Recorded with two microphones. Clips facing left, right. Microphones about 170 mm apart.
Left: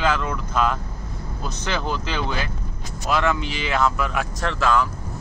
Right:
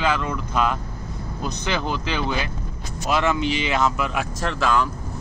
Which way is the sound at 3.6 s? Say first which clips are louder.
Even; 15° right (ahead or behind).